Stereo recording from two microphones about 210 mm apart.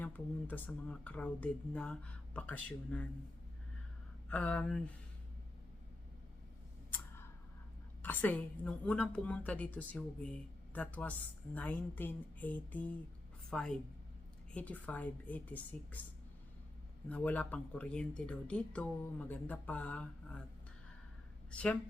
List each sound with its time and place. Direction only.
0.0 s a woman's voice: 10° left (ahead or behind)
4.3 s speech: 5° left (ahead or behind)
8.0 s a woman's voice: 10° left (ahead or behind)
17.1 s speech: 5° left (ahead or behind)
21.5 s speech: 5° left (ahead or behind)